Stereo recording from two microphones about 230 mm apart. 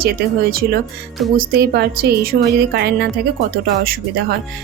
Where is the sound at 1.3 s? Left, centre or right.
Right.